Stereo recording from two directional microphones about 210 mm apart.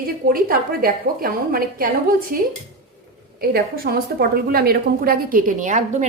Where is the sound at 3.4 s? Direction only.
45° right (ahead or behind).